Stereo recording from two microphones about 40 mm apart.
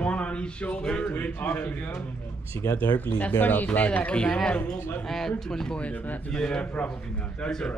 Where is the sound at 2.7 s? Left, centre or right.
Left.